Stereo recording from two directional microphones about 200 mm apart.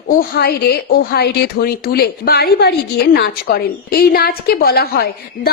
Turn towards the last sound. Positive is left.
turn(degrees=50)  # may be behind; listen again after turning